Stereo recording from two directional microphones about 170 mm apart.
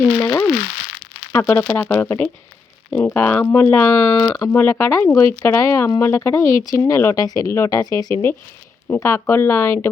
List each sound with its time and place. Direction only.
0.0 s speech: 15° left (ahead or behind)